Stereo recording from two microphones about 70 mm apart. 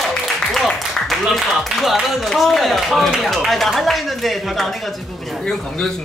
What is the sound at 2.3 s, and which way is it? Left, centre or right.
Speech, centre.